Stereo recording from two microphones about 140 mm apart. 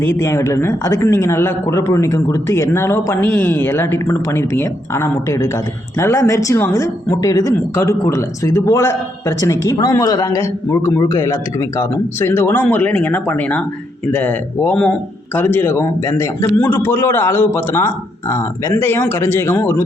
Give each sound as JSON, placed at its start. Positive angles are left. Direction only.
{"t": 0.0, "sound": "a man's voice", "side_deg": 20}